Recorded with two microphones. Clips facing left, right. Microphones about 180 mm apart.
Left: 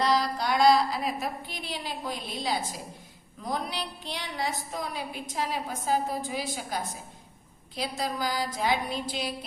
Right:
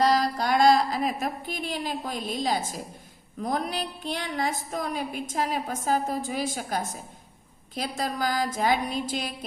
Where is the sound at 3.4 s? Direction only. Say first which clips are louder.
Right 4 dB; 50° right (ahead or behind).